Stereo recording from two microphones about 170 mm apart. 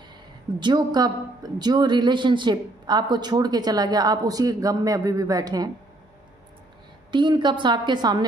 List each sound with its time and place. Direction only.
0.6 s a woman's voice: 25° right (ahead or behind)
7.1 s a woman's voice: 25° right (ahead or behind)